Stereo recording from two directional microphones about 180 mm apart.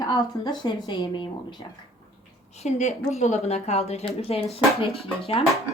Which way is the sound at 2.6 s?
40° left (ahead or behind).